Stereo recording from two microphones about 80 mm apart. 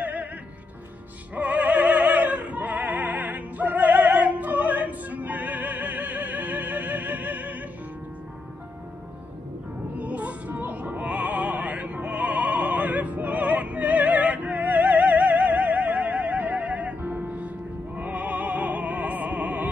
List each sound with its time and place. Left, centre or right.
0.0 s music: centre
1.3 s opera: centre
9.9 s opera: centre